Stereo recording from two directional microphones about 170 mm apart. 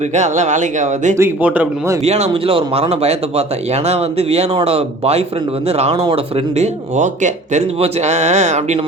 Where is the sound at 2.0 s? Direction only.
40° right (ahead or behind).